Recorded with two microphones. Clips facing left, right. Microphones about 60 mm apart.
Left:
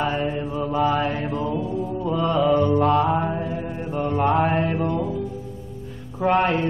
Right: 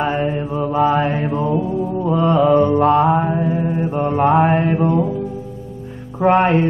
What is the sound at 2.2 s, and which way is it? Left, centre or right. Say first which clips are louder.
Mantra: right 5 dB; right.